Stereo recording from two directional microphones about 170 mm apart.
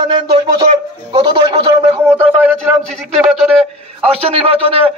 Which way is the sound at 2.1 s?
10° right (ahead or behind).